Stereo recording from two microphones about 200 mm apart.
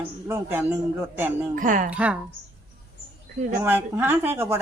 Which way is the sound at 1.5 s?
40° right (ahead or behind).